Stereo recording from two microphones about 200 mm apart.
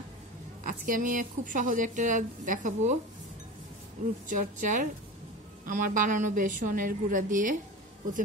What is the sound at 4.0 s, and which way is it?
A woman's voice, 35° right (ahead or behind).